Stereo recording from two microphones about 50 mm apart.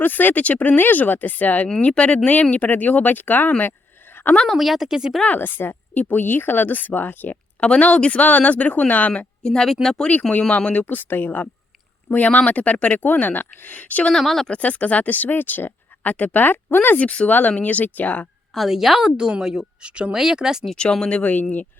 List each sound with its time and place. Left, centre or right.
0.0 s speech: left
3.6 s a sound: left
4.4 s a woman's voice: centre
5.2 s speech: left
7.6 s speech: left
9.4 s speech: centre
10.7 s speech: left
14.1 s speech: centre
14.5 s speech: left
17.0 s speech: left
18.5 s a woman's voice: centre
19.8 s a woman's voice: right
21.1 s speech: left